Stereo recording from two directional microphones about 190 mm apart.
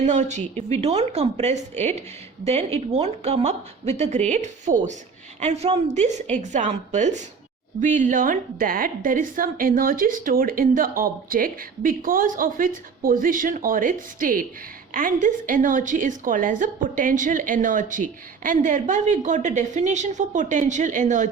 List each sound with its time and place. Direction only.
0.0 s a woman's voice: 40° right (ahead or behind)